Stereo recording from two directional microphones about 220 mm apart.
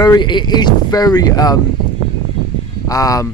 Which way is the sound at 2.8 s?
15° left (ahead or behind).